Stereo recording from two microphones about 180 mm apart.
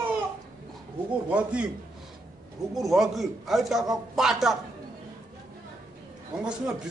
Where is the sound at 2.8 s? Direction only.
Centre (ahead or behind).